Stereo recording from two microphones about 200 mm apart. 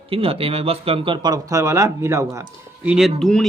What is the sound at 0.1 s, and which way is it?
Speech, 30° right (ahead or behind).